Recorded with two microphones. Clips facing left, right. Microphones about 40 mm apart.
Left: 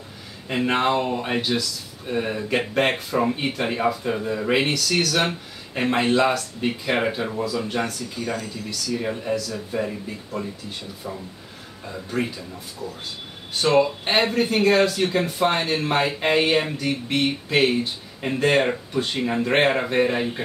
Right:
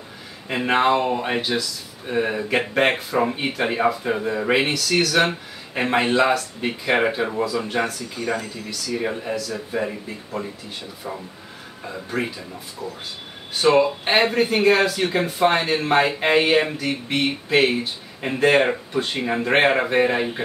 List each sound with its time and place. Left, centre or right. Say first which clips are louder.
0.5 s speech: right 2 dB; centre
9.7 s speech: even; centre
11.8 s speech: even; centre
13.6 s speech: right 2 dB; centre